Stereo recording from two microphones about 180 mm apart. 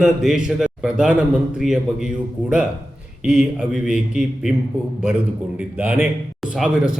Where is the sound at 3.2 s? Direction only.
5° right (ahead or behind).